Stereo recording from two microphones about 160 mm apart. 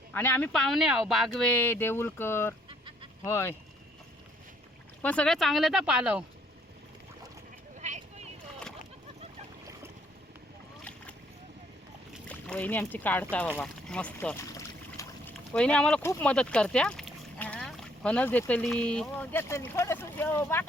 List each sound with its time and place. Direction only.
0.1 s speech: 10° left (ahead or behind)
2.6 s fowl: 30° right (ahead or behind)
3.2 s speech: 15° left (ahead or behind)
5.0 s speech: 5° left (ahead or behind)
7.8 s a sound: 45° right (ahead or behind)
12.3 s speech: 10° left (ahead or behind)
13.6 s boat: 5° left (ahead or behind)
16.2 s speech: 5° left (ahead or behind)